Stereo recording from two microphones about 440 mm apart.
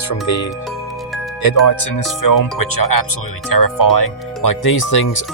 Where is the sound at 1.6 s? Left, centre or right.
Left.